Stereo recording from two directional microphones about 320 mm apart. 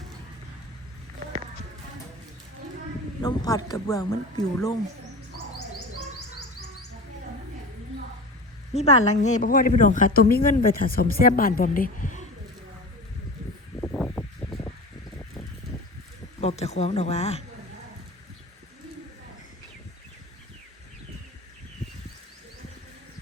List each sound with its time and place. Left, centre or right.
3.2 s speech: centre
8.7 s a woman's voice: centre
13.8 s a sound: centre
16.4 s speech: centre